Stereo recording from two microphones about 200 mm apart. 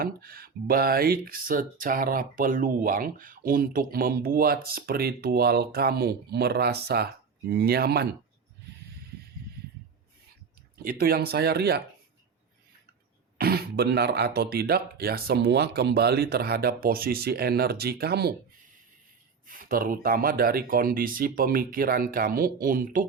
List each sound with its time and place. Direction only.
0.0 s speech: 45° right (ahead or behind)
10.8 s speech: 50° right (ahead or behind)
13.4 s speech: 50° right (ahead or behind)
19.5 s speech: 45° right (ahead or behind)